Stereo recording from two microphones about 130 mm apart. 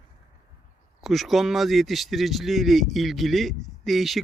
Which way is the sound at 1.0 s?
Centre (ahead or behind).